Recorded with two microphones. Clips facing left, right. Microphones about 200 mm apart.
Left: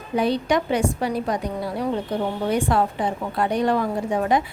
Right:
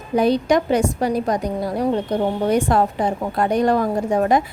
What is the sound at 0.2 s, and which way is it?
A woman's voice, 40° right (ahead or behind).